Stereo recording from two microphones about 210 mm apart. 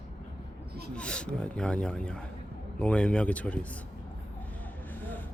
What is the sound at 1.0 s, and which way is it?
A man's voice, 5° left (ahead or behind).